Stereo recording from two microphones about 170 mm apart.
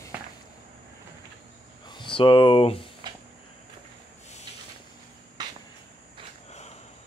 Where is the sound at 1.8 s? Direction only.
25° left (ahead or behind).